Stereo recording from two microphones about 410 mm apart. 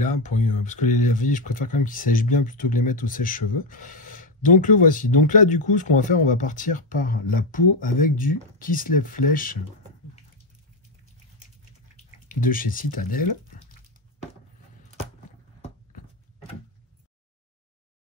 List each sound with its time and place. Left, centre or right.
0.0 s speech: centre
12.4 s speech: centre